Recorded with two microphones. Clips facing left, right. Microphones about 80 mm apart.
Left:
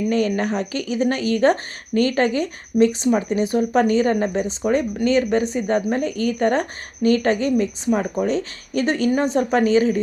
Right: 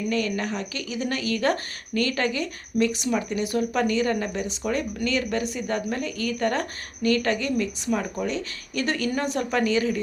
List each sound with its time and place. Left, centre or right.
0.1 s speech: left